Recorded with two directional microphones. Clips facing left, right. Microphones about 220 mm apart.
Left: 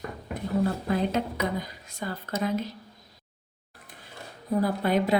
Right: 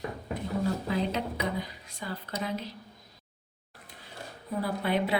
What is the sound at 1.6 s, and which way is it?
Speech, 45° left (ahead or behind).